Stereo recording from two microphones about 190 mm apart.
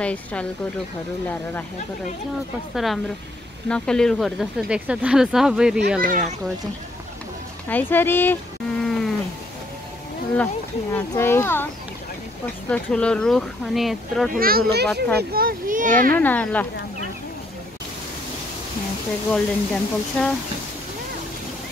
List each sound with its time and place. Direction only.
0.0 s speech: 5° left (ahead or behind)
2.7 s speech: centre (ahead or behind)
5.9 s speech: 45° right (ahead or behind)
7.6 s speech: 10° left (ahead or behind)
8.8 s cat: centre (ahead or behind)
10.3 s speech: 10° left (ahead or behind)
14.3 s speech: 50° right (ahead or behind)
16.2 s speech: 10° left (ahead or behind)
19.3 s speech: 5° left (ahead or behind)